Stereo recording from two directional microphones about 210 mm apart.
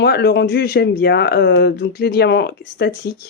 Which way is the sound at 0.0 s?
50° left (ahead or behind).